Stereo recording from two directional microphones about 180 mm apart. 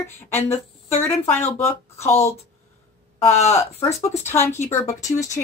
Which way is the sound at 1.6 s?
15° left (ahead or behind).